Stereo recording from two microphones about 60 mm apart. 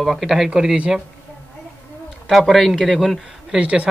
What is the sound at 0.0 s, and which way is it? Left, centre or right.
Speech, centre.